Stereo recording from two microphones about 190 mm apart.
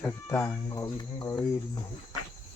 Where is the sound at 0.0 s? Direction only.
15° left (ahead or behind).